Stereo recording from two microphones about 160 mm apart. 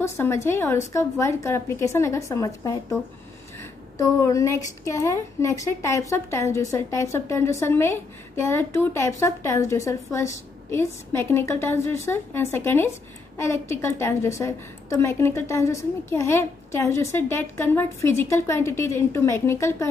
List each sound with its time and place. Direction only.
0.0 s a woman's voice: 15° left (ahead or behind)
4.0 s a woman's voice: 20° left (ahead or behind)